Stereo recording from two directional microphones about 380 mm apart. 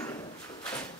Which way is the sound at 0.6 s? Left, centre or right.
Centre.